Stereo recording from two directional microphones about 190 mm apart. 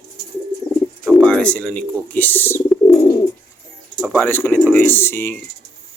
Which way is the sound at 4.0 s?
5° left (ahead or behind).